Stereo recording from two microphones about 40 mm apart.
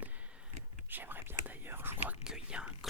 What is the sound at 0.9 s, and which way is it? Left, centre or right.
Whispering, right.